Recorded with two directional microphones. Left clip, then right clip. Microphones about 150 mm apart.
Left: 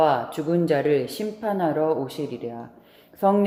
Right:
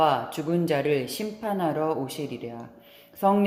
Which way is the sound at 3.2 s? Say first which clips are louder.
Left 2 dB; 10° right (ahead or behind).